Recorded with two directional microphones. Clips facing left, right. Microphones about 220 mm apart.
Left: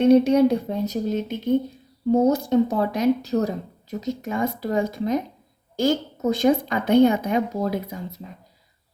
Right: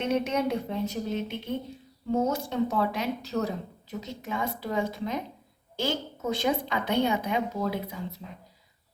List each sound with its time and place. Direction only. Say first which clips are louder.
0.0 s speech: left 12 dB; 35° left (ahead or behind)